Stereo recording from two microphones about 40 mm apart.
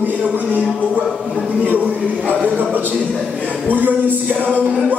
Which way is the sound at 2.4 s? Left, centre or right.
Right.